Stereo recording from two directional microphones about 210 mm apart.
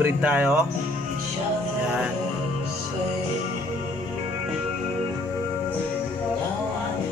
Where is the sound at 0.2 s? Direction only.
5° right (ahead or behind).